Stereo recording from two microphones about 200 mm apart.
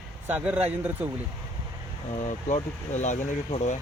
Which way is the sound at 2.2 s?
35° left (ahead or behind).